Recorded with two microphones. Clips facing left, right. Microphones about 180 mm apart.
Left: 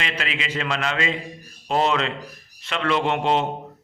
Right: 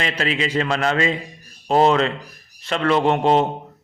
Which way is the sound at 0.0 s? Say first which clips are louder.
Right 6 dB; 40° right (ahead or behind).